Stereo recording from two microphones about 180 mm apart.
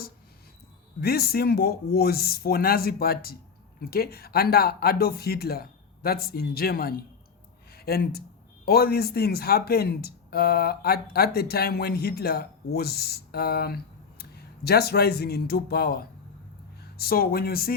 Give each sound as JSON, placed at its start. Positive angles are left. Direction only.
{"t": 1.0, "sound": "speech", "side_deg": 60}